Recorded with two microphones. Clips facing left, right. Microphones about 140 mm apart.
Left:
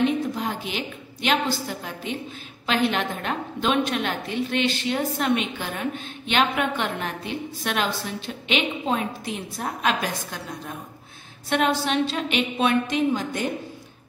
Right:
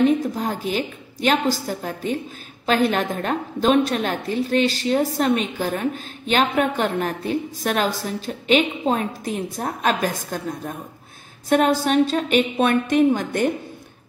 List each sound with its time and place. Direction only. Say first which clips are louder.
0.2 s a woman's voice: right 3 dB; 40° right (ahead or behind); by 13.5 s 55° right (ahead or behind)